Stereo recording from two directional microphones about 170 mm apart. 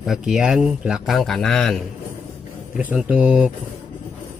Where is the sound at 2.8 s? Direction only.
10° right (ahead or behind).